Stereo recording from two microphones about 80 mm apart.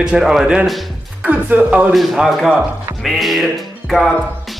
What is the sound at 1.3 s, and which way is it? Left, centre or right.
Speech, right.